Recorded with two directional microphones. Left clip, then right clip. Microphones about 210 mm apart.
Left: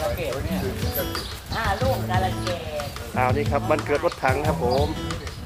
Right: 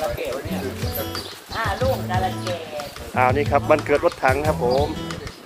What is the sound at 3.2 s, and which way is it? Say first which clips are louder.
Speech: right 5 dB; 30° right (ahead or behind).